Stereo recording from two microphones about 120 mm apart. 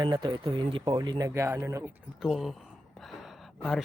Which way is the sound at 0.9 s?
35° right (ahead or behind).